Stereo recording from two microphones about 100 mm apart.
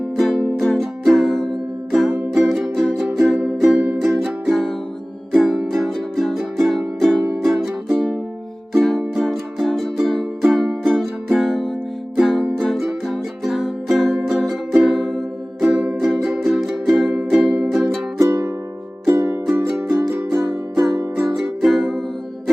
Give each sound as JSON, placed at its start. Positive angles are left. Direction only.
{"t": 0.2, "sound": "music", "side_deg": 0}
{"t": 18.2, "sound": "music", "side_deg": -25}
{"t": 21.2, "sound": "music", "side_deg": -5}